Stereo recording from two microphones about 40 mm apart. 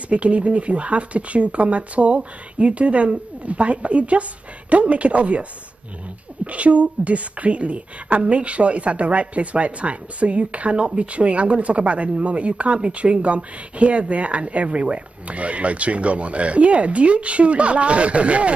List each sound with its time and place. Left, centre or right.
0.1 s a woman's voice: right